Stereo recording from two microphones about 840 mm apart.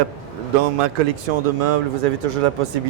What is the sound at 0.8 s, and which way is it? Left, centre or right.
Speech, right.